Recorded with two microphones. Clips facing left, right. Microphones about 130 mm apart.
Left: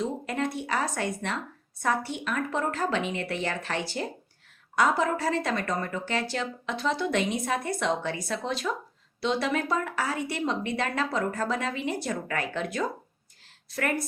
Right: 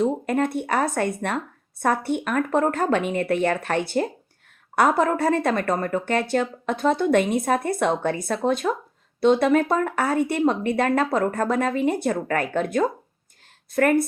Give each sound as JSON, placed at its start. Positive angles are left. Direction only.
{"t": 0.0, "sound": "speech", "side_deg": -55}